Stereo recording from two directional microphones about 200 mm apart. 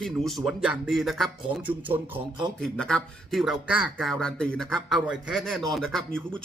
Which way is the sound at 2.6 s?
5° left (ahead or behind).